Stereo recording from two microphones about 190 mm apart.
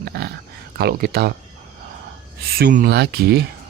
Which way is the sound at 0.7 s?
55° right (ahead or behind).